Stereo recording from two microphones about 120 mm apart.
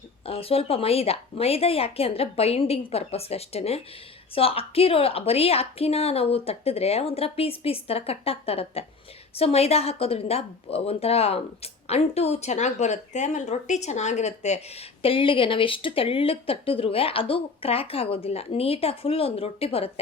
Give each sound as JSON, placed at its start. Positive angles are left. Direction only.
{"t": 0.3, "sound": "speech", "side_deg": 55}
{"t": 15.0, "sound": "speech", "side_deg": 45}